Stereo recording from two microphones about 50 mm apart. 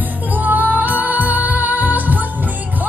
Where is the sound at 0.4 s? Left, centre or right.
Right.